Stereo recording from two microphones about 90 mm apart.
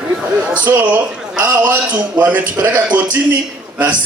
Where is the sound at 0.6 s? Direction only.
20° right (ahead or behind).